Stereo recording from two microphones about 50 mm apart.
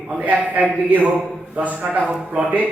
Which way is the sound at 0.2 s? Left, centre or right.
Right.